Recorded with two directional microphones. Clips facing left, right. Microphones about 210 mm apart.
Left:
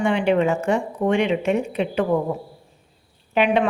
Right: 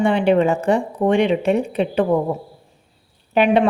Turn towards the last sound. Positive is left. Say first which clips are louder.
# right 3 dB
turn(degrees=-35)  # may be behind; listen again after turning